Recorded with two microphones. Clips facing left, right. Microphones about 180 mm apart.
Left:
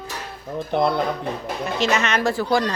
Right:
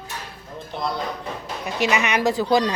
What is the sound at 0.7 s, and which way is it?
Speech, 60° left (ahead or behind).